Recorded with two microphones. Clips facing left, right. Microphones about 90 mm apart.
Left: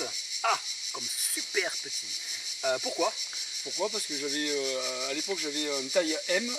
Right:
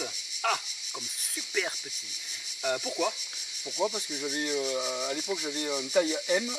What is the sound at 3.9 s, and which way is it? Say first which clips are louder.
Speech: even; 20° right (ahead or behind).